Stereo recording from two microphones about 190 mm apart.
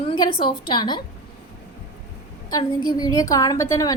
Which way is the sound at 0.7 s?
25° left (ahead or behind).